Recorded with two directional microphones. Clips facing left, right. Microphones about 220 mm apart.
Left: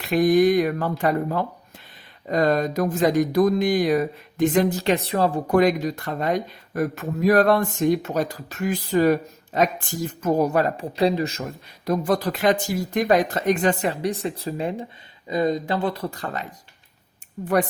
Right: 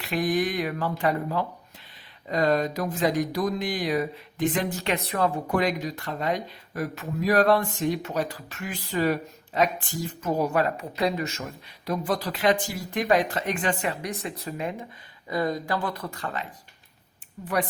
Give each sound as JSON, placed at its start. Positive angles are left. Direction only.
{"t": 0.0, "sound": "speech", "side_deg": 45}
{"t": 11.9, "sound": "speech", "side_deg": 45}
{"t": 15.3, "sound": "speech", "side_deg": 20}